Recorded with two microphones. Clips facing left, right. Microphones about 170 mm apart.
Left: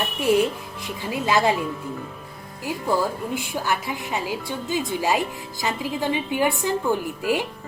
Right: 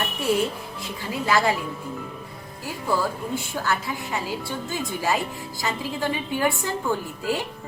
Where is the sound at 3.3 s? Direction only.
15° left (ahead or behind).